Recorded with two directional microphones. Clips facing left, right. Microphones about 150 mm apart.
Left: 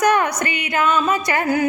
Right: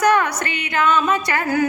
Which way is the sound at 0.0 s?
15° left (ahead or behind).